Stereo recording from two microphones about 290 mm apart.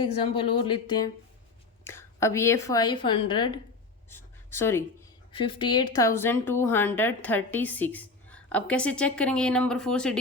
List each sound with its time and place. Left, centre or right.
0.0 s a woman's voice: centre
4.1 s a sound: centre
5.3 s speech: centre